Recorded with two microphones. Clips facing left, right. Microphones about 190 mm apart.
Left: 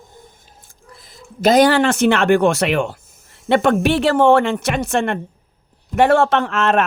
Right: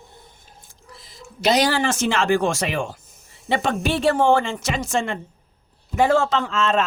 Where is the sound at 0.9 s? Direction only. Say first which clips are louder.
Left 1 dB; 55° left (ahead or behind).